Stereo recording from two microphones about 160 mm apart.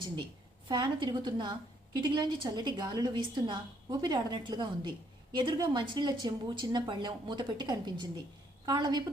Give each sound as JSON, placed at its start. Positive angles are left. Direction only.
{"t": 0.7, "sound": "a woman's voice", "side_deg": -30}